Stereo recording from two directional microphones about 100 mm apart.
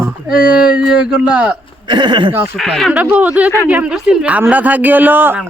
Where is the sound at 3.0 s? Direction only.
15° right (ahead or behind).